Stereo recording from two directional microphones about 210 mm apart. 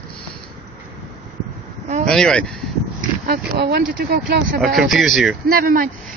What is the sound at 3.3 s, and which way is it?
Speech, 50° right (ahead or behind).